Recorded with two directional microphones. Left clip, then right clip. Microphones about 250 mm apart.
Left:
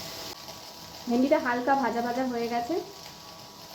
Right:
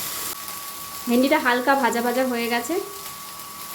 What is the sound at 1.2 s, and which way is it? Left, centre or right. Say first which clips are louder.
Speech: right 5 dB; right.